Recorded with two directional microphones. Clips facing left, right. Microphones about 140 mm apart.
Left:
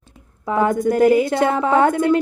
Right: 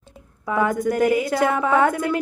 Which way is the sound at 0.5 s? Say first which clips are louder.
Left 3 dB; 30° left (ahead or behind).